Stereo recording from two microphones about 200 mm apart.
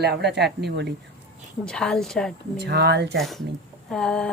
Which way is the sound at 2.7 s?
55° right (ahead or behind).